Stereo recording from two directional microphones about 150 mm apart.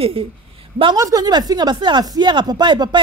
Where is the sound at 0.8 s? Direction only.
25° right (ahead or behind).